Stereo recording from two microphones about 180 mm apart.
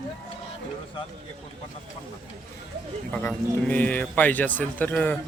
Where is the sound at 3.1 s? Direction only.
10° left (ahead or behind).